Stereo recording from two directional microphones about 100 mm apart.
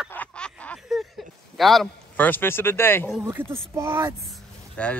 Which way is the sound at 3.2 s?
25° right (ahead or behind).